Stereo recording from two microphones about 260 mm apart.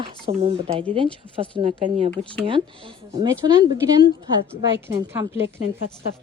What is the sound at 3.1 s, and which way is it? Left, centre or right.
A woman's voice, centre.